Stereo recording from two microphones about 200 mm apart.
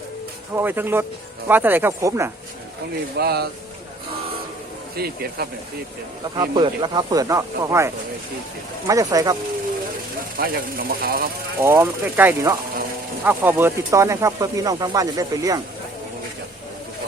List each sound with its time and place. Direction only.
0.5 s speech: 10° right (ahead or behind)
3.2 s speech: 50° right (ahead or behind)
4.9 s speech: 50° right (ahead or behind)
6.3 s speech: 20° right (ahead or behind)
10.3 s speech: 45° right (ahead or behind)
11.6 s speech: 10° right (ahead or behind)